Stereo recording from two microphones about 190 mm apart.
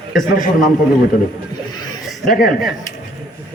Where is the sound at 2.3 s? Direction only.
45° left (ahead or behind).